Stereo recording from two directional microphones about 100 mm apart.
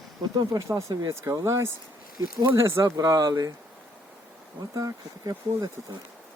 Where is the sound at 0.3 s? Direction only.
35° right (ahead or behind).